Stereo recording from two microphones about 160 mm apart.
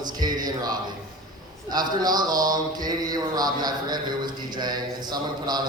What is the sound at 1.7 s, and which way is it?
Speech, 25° right (ahead or behind).